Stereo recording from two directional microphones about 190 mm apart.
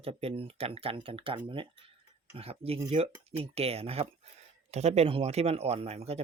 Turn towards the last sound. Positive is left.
turn(degrees=-35)  # may be behind; listen again after turning